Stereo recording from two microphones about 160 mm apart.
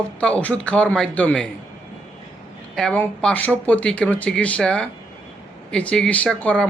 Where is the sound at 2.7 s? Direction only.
5° left (ahead or behind).